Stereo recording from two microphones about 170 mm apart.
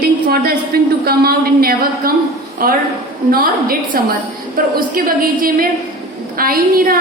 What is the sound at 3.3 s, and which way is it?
A woman's voice, 60° right (ahead or behind).